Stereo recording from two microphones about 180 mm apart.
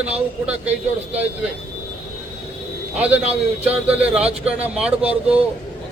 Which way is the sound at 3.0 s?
10° right (ahead or behind).